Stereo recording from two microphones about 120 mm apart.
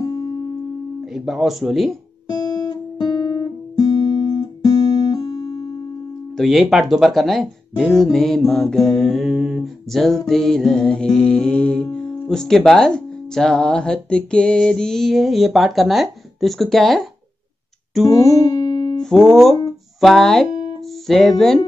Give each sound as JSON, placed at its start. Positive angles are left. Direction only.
{"t": 0.0, "sound": "music", "side_deg": 30}
{"t": 1.1, "sound": "speech", "side_deg": -5}
{"t": 2.2, "sound": "guitar", "side_deg": 30}
{"t": 6.3, "sound": "speech", "side_deg": 0}
{"t": 18.0, "sound": "music", "side_deg": 30}
{"t": 19.0, "sound": "speech", "side_deg": 5}